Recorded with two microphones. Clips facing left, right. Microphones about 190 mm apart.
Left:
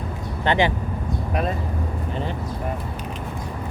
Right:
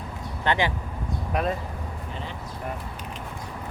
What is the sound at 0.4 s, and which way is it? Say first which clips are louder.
Speech: left 4 dB; 20° left (ahead or behind).